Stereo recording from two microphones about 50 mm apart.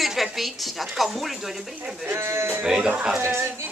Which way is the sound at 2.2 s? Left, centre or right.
Right.